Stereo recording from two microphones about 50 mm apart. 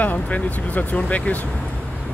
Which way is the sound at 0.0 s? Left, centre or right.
Left.